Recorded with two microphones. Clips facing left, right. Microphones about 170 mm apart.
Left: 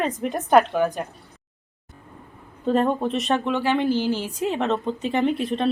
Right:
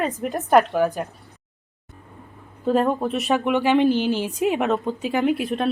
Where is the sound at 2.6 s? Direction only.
5° right (ahead or behind).